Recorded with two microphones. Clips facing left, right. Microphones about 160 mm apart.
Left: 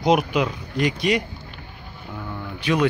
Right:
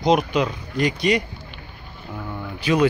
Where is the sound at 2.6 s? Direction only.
Centre (ahead or behind).